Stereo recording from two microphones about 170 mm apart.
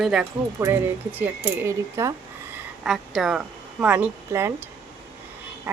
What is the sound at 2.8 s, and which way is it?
Speech, centre (ahead or behind).